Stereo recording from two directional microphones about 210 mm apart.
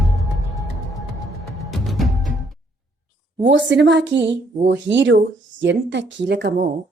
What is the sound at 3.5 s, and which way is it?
Speech, 60° right (ahead or behind).